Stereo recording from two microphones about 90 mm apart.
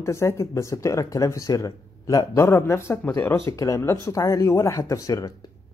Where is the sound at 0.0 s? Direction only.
35° left (ahead or behind).